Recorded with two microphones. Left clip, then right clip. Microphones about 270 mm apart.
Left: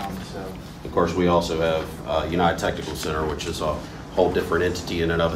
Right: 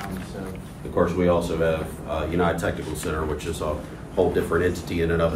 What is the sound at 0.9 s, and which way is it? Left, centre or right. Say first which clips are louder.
Speech: left 1 dB; left.